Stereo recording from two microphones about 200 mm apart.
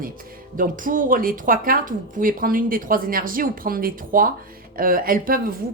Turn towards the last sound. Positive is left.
turn(degrees=-45)  # may be behind; listen again after turning